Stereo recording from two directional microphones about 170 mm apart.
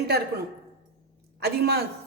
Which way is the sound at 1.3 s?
70° right (ahead or behind).